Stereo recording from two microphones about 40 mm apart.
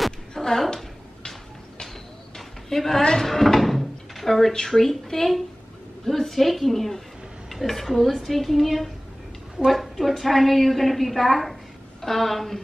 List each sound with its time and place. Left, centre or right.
0.3 s a woman's voice: centre
2.3 s a sound: centre
3.0 s speech: centre
3.3 s a woman's voice: centre